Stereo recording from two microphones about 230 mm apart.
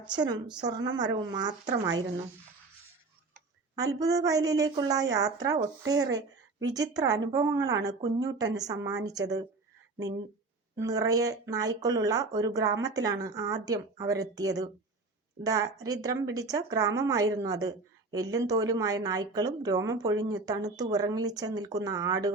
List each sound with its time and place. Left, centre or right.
0.0 s a woman's voice: centre
3.8 s a woman's voice: centre
10.8 s a woman's voice: centre